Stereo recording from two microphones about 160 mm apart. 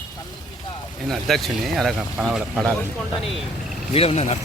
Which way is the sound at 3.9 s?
40° left (ahead or behind).